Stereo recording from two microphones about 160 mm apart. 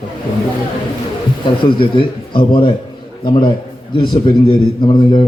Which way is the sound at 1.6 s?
30° left (ahead or behind).